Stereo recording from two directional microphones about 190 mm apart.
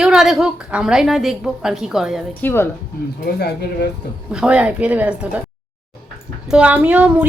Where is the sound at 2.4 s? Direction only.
10° left (ahead or behind).